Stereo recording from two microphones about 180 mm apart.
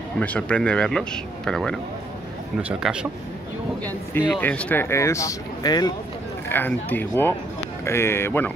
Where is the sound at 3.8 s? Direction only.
10° left (ahead or behind).